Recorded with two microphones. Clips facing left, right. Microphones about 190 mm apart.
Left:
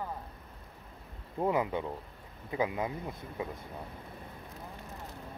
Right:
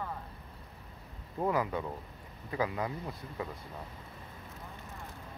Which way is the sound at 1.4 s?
20° left (ahead or behind).